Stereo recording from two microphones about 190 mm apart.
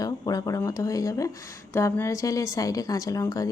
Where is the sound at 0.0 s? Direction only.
20° left (ahead or behind).